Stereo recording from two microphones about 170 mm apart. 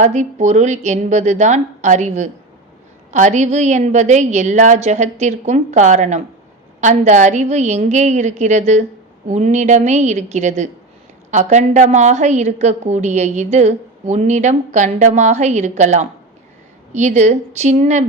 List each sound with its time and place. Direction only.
0.0 s a woman's voice: 45° right (ahead or behind)